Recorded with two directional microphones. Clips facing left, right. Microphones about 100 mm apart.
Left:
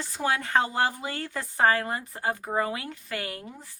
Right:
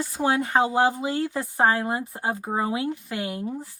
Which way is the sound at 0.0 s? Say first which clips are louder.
Right 5 dB; 15° right (ahead or behind).